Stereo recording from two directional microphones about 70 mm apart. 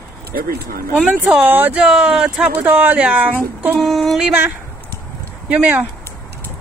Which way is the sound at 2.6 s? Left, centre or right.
Right.